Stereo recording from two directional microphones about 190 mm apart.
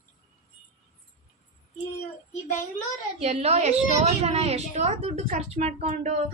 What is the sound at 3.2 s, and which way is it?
A woman's voice, 35° right (ahead or behind).